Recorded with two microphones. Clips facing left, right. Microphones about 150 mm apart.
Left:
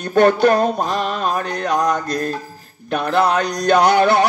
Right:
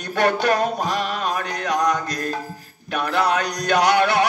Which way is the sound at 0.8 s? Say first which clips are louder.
Left 3 dB; 30° left (ahead or behind).